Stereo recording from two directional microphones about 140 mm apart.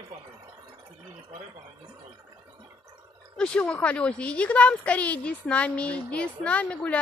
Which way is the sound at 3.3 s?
5° left (ahead or behind).